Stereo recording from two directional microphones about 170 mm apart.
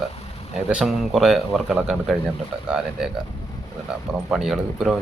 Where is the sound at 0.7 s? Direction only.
5° right (ahead or behind).